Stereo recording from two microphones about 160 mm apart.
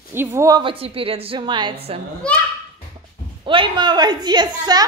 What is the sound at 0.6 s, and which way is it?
A woman's voice, 35° right (ahead or behind).